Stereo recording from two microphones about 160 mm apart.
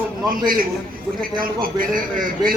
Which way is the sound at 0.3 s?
60° right (ahead or behind).